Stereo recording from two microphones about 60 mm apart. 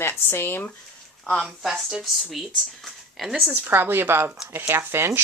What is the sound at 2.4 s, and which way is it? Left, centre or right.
Speech, centre.